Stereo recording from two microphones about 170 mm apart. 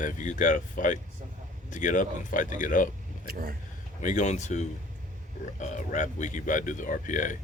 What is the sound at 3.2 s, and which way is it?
Speech, 60° right (ahead or behind).